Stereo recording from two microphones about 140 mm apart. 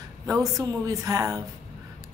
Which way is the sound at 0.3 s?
25° right (ahead or behind).